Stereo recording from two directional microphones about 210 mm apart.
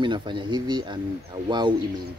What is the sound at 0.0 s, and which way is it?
Speech, 20° right (ahead or behind).